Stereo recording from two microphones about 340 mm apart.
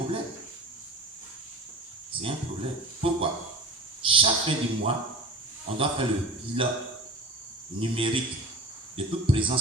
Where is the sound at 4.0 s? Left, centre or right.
Centre.